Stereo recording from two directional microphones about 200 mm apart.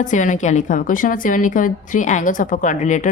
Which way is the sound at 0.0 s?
40° left (ahead or behind).